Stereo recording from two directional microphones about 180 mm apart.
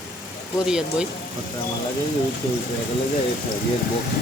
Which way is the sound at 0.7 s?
5° right (ahead or behind).